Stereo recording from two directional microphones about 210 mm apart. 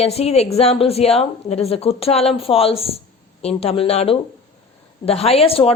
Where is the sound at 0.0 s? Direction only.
30° left (ahead or behind).